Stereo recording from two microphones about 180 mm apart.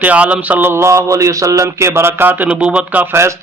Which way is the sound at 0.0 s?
5° right (ahead or behind).